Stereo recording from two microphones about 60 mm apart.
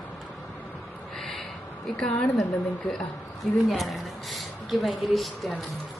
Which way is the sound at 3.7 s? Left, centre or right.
Centre.